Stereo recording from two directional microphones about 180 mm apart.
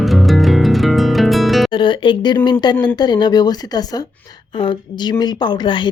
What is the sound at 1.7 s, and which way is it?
Music, 30° left (ahead or behind).